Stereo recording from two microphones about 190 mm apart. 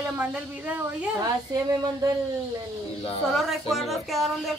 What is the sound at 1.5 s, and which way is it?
Speech, 20° right (ahead or behind).